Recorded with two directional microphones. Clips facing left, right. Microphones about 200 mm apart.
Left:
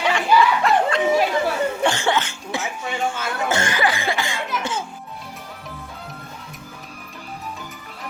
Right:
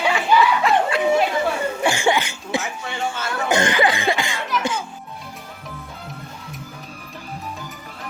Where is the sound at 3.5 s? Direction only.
20° right (ahead or behind).